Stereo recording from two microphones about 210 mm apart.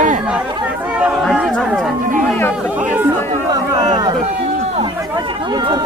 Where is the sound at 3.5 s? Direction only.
20° right (ahead or behind).